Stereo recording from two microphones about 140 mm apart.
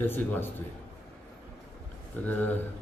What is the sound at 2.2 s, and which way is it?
Speech, 15° left (ahead or behind).